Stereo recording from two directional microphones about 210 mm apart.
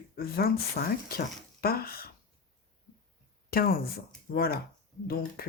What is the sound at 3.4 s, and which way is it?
Speech, 45° left (ahead or behind).